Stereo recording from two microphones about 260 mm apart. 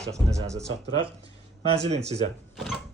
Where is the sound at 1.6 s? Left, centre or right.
Right.